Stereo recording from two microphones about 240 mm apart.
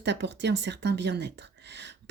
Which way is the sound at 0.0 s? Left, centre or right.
Right.